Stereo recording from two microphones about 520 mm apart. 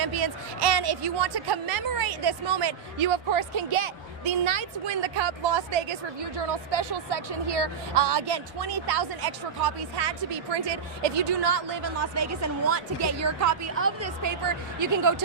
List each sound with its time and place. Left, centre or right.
0.0 s speech: right
3.1 s a woman's voice: right
7.4 s music: right
8.3 s speech: right
12.1 s a woman's voice: right